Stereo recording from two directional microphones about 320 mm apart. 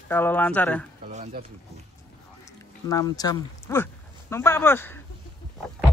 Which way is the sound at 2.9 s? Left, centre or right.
Centre.